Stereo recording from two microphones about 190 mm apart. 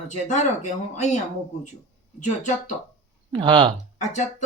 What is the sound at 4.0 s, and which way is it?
Speech, 40° left (ahead or behind).